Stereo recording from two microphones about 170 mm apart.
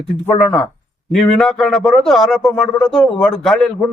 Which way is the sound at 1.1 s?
Centre (ahead or behind).